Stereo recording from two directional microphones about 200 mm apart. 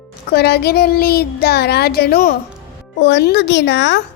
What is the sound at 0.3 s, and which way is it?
Speech, 55° left (ahead or behind).